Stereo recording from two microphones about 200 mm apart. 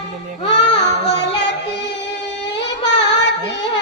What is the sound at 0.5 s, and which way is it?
Child singing, 60° left (ahead or behind).